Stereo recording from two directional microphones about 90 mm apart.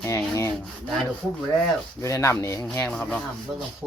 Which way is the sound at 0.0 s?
35° left (ahead or behind).